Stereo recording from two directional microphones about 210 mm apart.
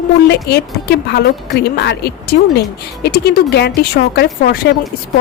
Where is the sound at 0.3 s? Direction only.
50° left (ahead or behind).